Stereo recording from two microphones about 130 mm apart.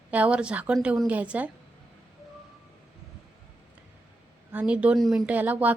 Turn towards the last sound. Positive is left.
turn(degrees=-15)  # may be behind; listen again after turning